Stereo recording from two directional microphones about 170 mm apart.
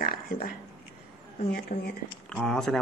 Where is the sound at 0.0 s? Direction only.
60° left (ahead or behind).